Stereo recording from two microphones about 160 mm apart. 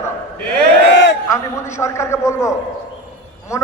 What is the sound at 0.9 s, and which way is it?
Speech, 90° left.